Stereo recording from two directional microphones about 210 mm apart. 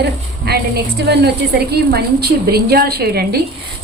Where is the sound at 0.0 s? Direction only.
50° right (ahead or behind).